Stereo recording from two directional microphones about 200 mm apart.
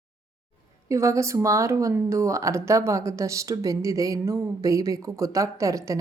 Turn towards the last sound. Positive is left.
turn(degrees=-15)  # may be behind; listen again after turning